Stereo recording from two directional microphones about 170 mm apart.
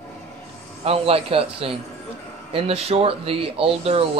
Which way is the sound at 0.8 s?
35° right (ahead or behind).